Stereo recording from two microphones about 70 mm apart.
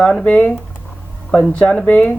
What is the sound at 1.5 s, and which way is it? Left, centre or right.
Speech, centre.